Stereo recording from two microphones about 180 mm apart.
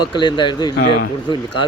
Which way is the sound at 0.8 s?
65° left (ahead or behind).